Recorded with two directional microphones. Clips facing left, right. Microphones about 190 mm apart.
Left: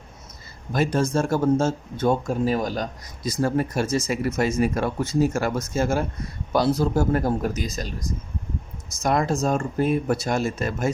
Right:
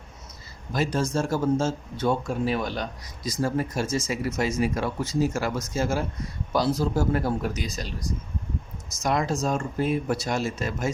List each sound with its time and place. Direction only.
0.7 s speech: 55° left (ahead or behind)
3.2 s speech: 60° left (ahead or behind)